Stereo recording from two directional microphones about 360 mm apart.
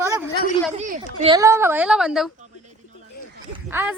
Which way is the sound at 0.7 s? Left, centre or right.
Centre.